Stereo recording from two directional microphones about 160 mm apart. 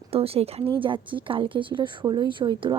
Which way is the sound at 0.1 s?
35° right (ahead or behind).